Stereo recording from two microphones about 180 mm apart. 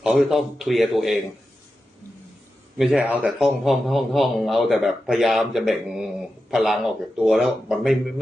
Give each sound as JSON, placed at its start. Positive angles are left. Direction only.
{"t": 0.0, "sound": "a man's voice", "side_deg": -5}
{"t": 2.7, "sound": "a man's voice", "side_deg": -5}